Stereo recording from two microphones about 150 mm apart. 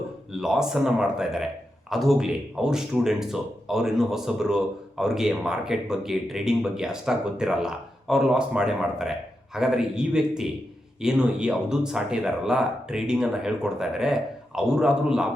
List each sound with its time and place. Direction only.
0.3 s speech: 5° right (ahead or behind)